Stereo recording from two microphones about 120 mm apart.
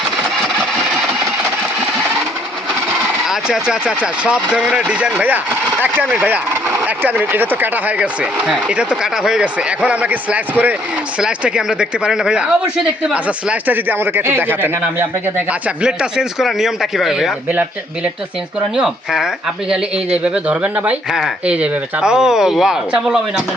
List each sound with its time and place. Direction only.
3.2 s speech: 5° right (ahead or behind)
6.2 s speech: 15° right (ahead or behind)
17.5 s speech: 15° right (ahead or behind)
18.8 s speech: 5° right (ahead or behind)